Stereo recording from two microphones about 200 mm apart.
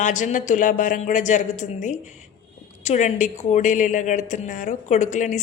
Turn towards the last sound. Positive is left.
turn(degrees=40)  # may be behind; listen again after turning